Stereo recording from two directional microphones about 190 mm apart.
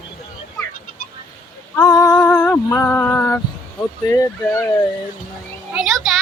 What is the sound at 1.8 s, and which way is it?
Female singing, 20° left (ahead or behind).